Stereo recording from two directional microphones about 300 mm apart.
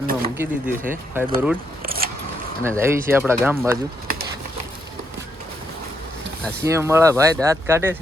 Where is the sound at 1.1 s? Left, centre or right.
Centre.